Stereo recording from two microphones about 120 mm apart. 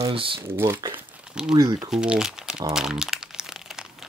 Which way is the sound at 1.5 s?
35° right (ahead or behind).